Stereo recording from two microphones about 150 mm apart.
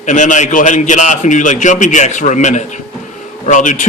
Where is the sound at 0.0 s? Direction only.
55° left (ahead or behind).